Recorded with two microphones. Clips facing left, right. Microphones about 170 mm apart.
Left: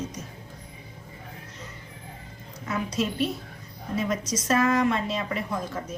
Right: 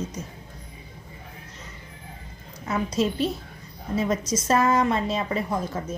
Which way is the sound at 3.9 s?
30° right (ahead or behind).